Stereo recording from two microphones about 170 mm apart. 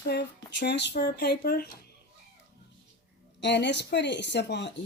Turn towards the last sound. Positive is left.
turn(degrees=90)